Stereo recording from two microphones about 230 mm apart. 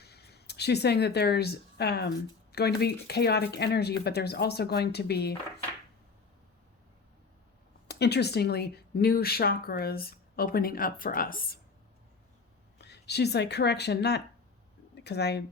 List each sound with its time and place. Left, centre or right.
0.0 s speech: left
7.9 s a woman's voice: left
12.8 s speech: left